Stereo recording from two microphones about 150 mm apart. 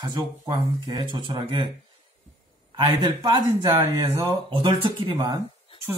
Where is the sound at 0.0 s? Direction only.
30° right (ahead or behind).